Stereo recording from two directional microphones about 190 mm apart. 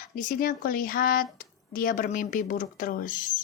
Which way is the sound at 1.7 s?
45° left (ahead or behind).